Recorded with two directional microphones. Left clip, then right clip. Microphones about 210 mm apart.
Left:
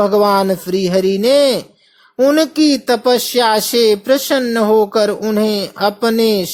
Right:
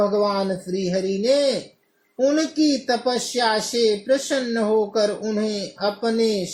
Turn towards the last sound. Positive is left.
turn(degrees=30)  # may be behind; listen again after turning